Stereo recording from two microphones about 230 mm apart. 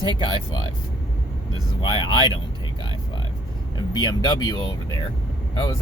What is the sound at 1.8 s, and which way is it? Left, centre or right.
Speech, centre.